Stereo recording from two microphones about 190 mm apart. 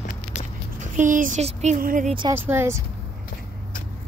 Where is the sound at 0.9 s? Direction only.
45° right (ahead or behind).